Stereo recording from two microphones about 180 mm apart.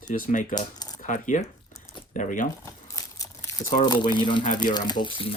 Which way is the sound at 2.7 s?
15° left (ahead or behind).